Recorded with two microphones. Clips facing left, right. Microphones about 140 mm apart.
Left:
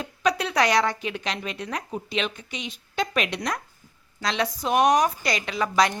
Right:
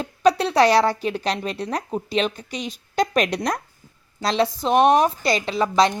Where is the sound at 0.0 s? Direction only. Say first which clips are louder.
Right 6 dB; 30° right (ahead or behind).